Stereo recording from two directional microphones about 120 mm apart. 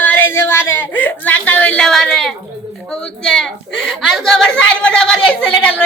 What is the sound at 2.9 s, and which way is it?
A woman's voice, 5° left (ahead or behind).